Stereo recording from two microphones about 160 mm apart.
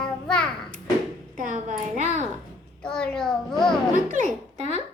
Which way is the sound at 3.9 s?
50° right (ahead or behind).